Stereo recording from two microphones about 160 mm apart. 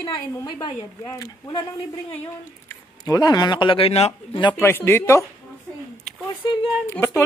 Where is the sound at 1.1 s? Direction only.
20° left (ahead or behind).